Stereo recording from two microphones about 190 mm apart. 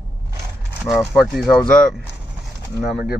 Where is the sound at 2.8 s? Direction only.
60° left (ahead or behind).